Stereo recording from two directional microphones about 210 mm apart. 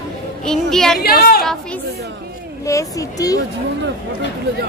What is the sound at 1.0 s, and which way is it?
Speech, 45° left (ahead or behind).